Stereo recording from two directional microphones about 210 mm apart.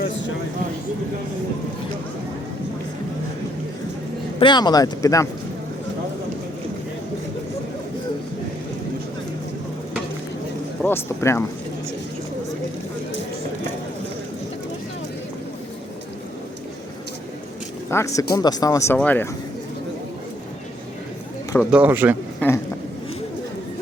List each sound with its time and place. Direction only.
4.4 s speech: 20° left (ahead or behind)
10.8 s speech: 10° left (ahead or behind)
17.9 s speech: 15° left (ahead or behind)
21.6 s speech: 5° right (ahead or behind)
22.4 s a sound: 10° left (ahead or behind)